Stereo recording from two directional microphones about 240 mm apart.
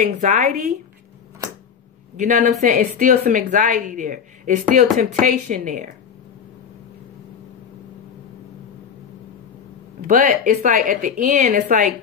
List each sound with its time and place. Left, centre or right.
0.0 s a woman's voice: right
2.1 s a woman's voice: right
10.0 s a woman's voice: right